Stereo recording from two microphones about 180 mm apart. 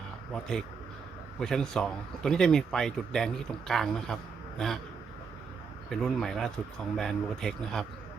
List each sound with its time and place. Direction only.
1.4 s speech: 5° left (ahead or behind)
5.9 s speech: centre (ahead or behind)